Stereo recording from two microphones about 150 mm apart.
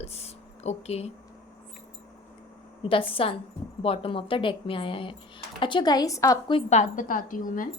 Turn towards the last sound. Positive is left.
turn(degrees=65)  # may be behind; listen again after turning